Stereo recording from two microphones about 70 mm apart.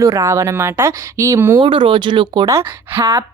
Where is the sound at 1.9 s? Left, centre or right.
Right.